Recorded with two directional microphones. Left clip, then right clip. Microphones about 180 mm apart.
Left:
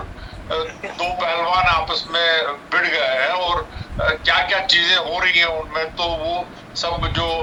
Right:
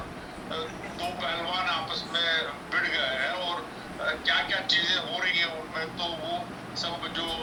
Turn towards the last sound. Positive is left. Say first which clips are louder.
# left 10 dB
turn(degrees=50)  # may be behind; listen again after turning